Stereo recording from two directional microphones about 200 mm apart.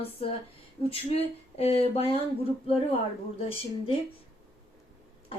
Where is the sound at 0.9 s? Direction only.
30° left (ahead or behind).